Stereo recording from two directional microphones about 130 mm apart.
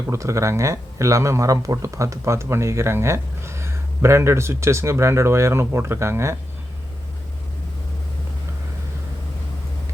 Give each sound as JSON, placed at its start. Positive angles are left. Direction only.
{"t": 0.1, "sound": "speech", "side_deg": -25}